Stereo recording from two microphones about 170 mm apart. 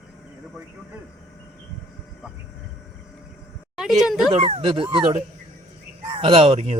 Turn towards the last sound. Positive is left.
turn(degrees=-35)  # may be behind; listen again after turning